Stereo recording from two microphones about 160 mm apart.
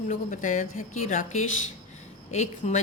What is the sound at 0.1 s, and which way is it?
A woman's voice, 50° left (ahead or behind).